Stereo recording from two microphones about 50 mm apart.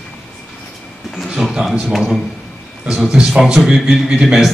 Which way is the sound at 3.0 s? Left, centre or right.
Centre.